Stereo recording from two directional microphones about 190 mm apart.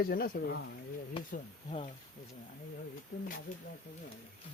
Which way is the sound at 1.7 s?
35° left (ahead or behind).